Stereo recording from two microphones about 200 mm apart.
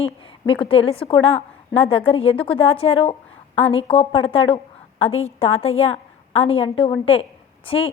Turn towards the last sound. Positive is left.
turn(degrees=30)  # may be behind; listen again after turning